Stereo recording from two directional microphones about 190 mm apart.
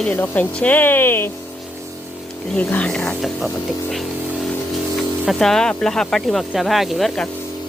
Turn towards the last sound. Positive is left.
turn(degrees=0)  # may be behind; listen again after turning